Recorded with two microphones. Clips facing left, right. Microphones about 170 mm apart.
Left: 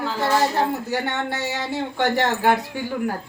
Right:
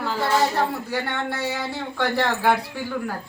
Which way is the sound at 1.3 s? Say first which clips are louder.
Left 2 dB; 20° left (ahead or behind).